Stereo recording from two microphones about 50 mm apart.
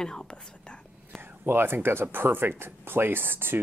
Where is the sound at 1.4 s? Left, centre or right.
Right.